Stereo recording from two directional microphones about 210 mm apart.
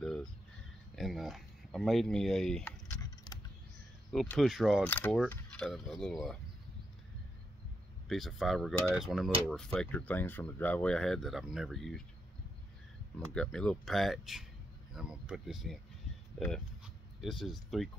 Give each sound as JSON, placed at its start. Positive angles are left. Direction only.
{"t": 0.0, "sound": "a sound", "side_deg": 5}
{"t": 0.9, "sound": "speech", "side_deg": 0}
{"t": 4.1, "sound": "speech", "side_deg": 0}
{"t": 8.1, "sound": "speech", "side_deg": 0}
{"t": 13.3, "sound": "speech", "side_deg": 5}